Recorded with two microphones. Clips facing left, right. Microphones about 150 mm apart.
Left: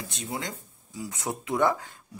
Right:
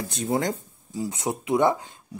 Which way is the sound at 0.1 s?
40° right (ahead or behind).